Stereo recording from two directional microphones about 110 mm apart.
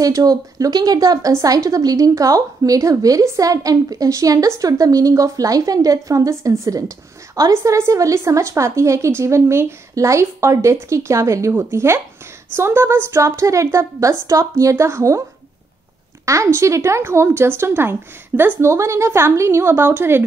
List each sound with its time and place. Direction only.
0.0 s a woman's voice: 35° right (ahead or behind)
16.3 s a woman's voice: 25° right (ahead or behind)